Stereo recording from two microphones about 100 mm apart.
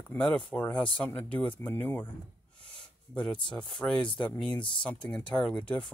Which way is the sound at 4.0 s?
55° left (ahead or behind).